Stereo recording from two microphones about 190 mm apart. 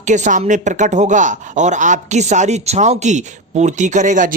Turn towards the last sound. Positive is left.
turn(degrees=-40)  # may be behind; listen again after turning